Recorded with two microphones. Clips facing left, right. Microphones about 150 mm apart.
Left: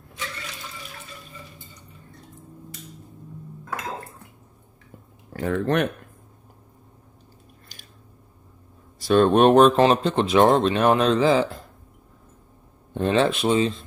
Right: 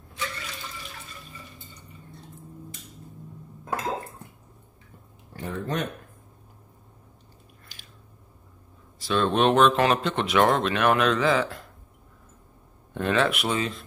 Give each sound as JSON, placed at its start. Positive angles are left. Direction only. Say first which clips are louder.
{"t": 5.3, "sound": "speech", "louder": "left 8 dB", "side_deg": 90}
{"t": 9.0, "sound": "speech", "louder": "left 6 dB", "side_deg": 50}
{"t": 12.9, "sound": "speech", "louder": "left 4 dB", "side_deg": 30}